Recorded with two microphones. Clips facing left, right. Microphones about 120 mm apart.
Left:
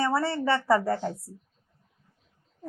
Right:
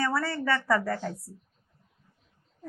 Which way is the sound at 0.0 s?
25° left (ahead or behind).